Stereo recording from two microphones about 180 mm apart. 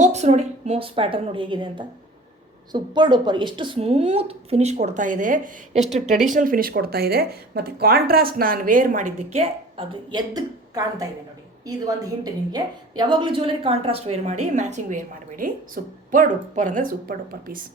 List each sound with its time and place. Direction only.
0.0 s speech: 40° right (ahead or behind)
10.1 s a woman's voice: 20° right (ahead or behind)
12.2 s speech: 20° right (ahead or behind); by 17.6 s 50° right (ahead or behind)